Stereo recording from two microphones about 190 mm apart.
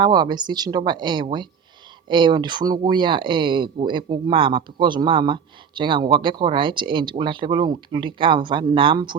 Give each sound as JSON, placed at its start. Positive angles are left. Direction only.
{"t": 0.0, "sound": "speech", "side_deg": -20}